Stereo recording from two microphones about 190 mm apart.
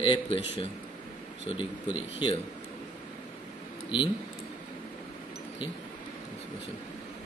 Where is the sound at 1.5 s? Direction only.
30° left (ahead or behind).